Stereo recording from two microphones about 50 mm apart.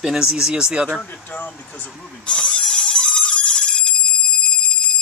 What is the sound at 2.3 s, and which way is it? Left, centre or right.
Telephone bell ringing, left.